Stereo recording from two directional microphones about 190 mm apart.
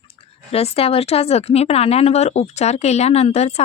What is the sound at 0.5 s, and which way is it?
Speech, 30° left (ahead or behind).